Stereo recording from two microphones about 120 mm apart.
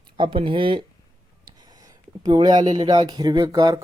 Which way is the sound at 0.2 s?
50° right (ahead or behind).